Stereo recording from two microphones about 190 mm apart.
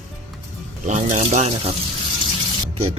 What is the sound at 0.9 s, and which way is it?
Speech, 40° right (ahead or behind).